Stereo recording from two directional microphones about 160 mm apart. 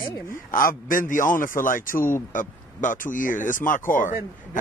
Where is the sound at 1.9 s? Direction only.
15° left (ahead or behind).